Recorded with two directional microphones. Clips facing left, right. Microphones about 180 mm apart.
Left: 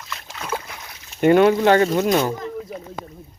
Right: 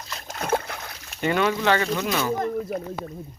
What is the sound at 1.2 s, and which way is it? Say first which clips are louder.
Speech: left 8 dB; 50° left (ahead or behind).